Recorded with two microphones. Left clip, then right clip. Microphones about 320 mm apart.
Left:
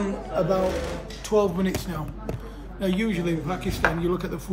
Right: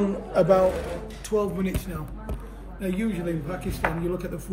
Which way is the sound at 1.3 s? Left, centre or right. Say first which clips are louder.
Left 4 dB; centre.